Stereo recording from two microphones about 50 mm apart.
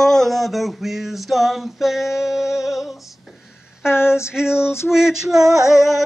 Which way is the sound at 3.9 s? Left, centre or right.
Left.